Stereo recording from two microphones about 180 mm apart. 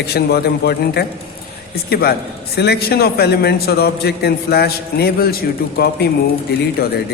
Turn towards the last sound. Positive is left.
turn(degrees=60)  # may be behind; listen again after turning